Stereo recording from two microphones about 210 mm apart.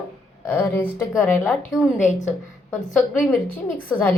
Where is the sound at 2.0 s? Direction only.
35° left (ahead or behind).